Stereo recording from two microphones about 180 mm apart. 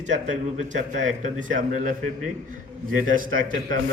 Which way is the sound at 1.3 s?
45° right (ahead or behind).